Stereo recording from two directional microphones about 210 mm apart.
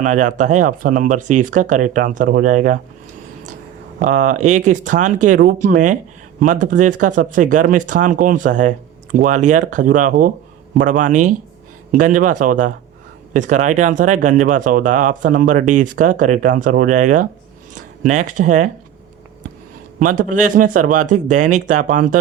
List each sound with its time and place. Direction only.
0.0 s speech: 35° right (ahead or behind)
4.0 s speech: 35° right (ahead or behind)
20.0 s speech: 40° right (ahead or behind)